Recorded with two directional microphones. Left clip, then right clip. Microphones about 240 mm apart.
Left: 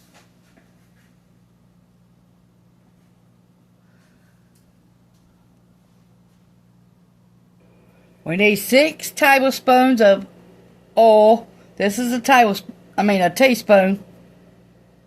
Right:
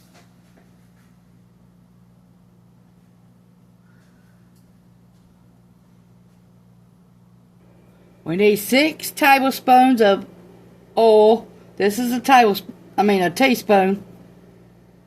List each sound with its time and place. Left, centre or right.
8.2 s a woman's voice: left